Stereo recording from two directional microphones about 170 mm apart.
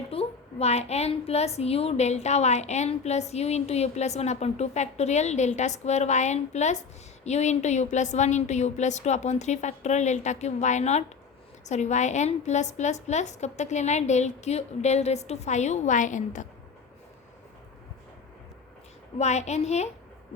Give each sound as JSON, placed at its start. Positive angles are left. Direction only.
{"t": 0.1, "sound": "a woman's voice", "side_deg": 35}
{"t": 19.2, "sound": "a woman's voice", "side_deg": 40}